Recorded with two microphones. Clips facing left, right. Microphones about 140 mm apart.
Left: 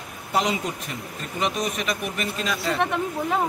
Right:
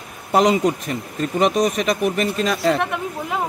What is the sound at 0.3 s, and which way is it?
Speech, 45° right (ahead or behind).